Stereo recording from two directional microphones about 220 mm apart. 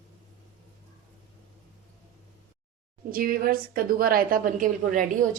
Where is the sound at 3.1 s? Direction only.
40° right (ahead or behind).